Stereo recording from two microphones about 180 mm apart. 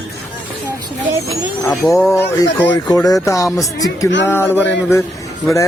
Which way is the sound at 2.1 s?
15° left (ahead or behind).